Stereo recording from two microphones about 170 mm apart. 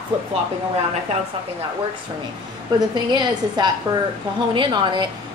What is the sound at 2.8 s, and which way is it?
A woman's voice, 25° right (ahead or behind).